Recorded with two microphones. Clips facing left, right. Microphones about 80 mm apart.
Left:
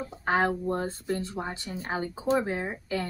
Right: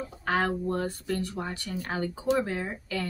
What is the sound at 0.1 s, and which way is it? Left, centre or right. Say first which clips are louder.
A woman's voice: left 2 dB; left.